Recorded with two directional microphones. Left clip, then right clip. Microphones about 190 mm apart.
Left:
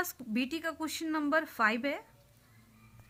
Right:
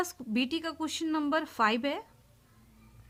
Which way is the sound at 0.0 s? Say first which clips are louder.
Right 3 dB; 15° right (ahead or behind).